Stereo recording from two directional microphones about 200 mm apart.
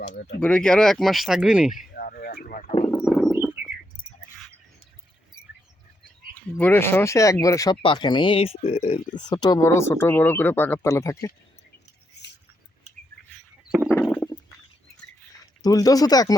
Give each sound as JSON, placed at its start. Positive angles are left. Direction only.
{"t": 0.3, "sound": "speech", "side_deg": 5}
{"t": 1.9, "sound": "a sound", "side_deg": 45}
{"t": 3.0, "sound": "a sound", "side_deg": 0}
{"t": 6.6, "sound": "speech", "side_deg": 10}
{"t": 9.1, "sound": "speech", "side_deg": 20}
{"t": 13.7, "sound": "stomach rumble", "side_deg": -5}
{"t": 13.9, "sound": "stomach rumble", "side_deg": 10}
{"t": 15.6, "sound": "speech", "side_deg": 20}